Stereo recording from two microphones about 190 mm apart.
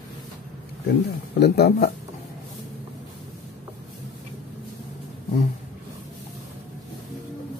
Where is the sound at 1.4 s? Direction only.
55° left (ahead or behind).